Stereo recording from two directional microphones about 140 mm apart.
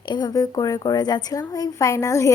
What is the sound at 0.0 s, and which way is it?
A woman's voice, 30° left (ahead or behind).